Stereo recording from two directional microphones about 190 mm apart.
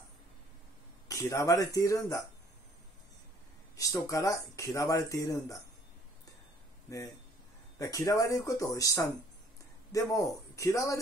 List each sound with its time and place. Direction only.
1.0 s speech: 15° left (ahead or behind)
3.7 s speech: 15° left (ahead or behind)
6.9 s speech: 15° left (ahead or behind)